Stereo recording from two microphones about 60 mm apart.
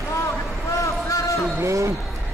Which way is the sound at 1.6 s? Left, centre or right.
Right.